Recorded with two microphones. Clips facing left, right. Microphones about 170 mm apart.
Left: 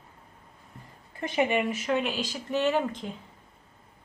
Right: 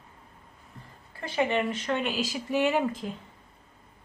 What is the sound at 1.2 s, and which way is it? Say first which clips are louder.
Speech: left 1 dB; 20° left (ahead or behind).